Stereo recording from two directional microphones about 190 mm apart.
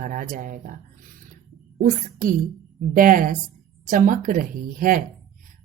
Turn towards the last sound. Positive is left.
turn(degrees=-45)  # may be behind; listen again after turning